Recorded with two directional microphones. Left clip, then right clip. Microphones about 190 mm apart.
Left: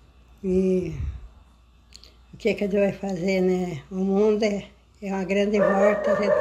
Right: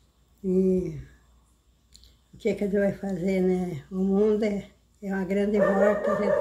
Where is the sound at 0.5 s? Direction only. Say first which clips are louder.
Left 1 dB; 5° left (ahead or behind).